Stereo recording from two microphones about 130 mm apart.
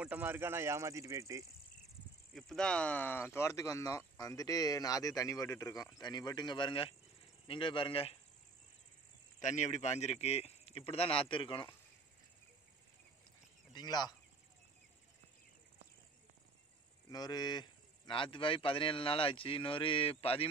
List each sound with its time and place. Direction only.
0.0 s speech: 15° right (ahead or behind)
2.3 s a man's voice: 5° left (ahead or behind); by 8.2 s 45° left (ahead or behind)
9.4 s a man's voice: 65° left (ahead or behind); by 11.7 s 40° left (ahead or behind)
13.7 s speech: 30° left (ahead or behind)
17.1 s a man's voice: 30° left (ahead or behind); by 20.4 s 45° left (ahead or behind)